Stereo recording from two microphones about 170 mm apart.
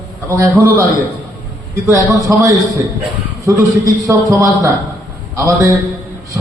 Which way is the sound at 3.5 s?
20° right (ahead or behind).